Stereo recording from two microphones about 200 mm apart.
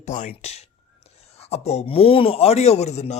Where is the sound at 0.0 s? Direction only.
35° left (ahead or behind).